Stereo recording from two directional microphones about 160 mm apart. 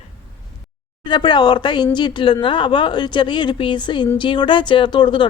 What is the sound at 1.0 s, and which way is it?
Speech, 30° left (ahead or behind).